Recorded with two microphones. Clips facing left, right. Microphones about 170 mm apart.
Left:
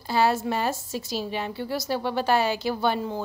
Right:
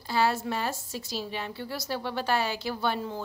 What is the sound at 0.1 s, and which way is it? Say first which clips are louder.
A woman's voice: left 4 dB; 20° left (ahead or behind).